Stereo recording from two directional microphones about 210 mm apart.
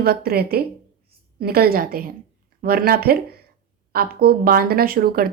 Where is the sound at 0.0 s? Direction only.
45° right (ahead or behind).